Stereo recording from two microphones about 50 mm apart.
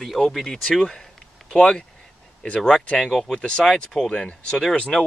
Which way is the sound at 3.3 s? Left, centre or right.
Centre.